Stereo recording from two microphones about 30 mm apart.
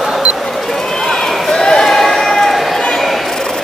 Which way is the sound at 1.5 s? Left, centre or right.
Left.